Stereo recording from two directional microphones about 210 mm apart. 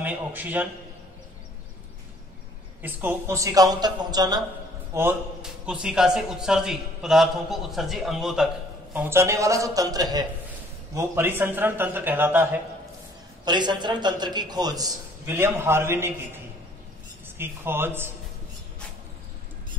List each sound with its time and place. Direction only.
0.0 s speech: 10° right (ahead or behind)
2.8 s speech: 10° right (ahead or behind)
4.9 s a man's voice: 5° right (ahead or behind)
13.5 s a man's voice: 20° right (ahead or behind)
17.4 s speech: 10° right (ahead or behind)